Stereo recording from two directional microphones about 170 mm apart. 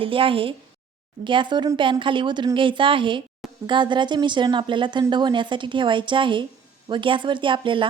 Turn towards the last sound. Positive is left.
turn(degrees=-30)  # may be behind; listen again after turning